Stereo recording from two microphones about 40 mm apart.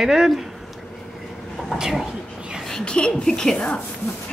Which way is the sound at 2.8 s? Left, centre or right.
Left.